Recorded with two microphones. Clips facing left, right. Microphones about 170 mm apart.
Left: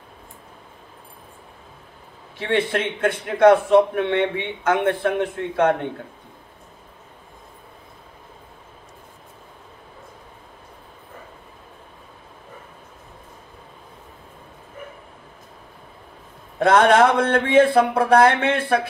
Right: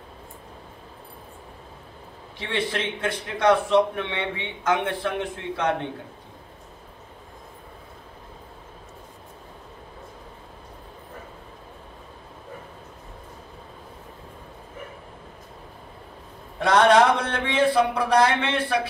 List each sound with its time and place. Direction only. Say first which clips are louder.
2.3 s a man's voice: left 6 dB; 50° left (ahead or behind)
16.5 s a man's voice: left 2 dB; 50° left (ahead or behind)